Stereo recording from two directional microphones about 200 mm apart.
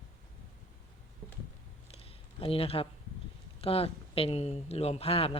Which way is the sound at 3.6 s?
30° left (ahead or behind).